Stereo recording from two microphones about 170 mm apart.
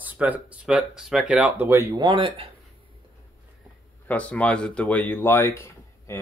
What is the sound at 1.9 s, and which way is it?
Speech, 25° right (ahead or behind).